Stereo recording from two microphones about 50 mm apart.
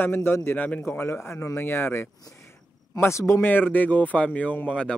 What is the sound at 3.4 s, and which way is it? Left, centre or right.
Speech, left.